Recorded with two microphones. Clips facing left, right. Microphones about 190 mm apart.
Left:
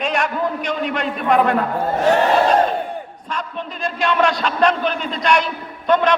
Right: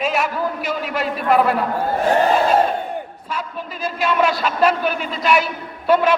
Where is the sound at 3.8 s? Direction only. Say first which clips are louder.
Even; 5° right (ahead or behind).